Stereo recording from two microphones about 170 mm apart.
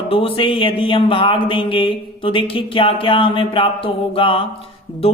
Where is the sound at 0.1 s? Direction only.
30° left (ahead or behind).